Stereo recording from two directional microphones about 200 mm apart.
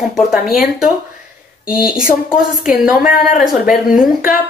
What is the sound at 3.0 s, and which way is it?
Speech, 40° left (ahead or behind).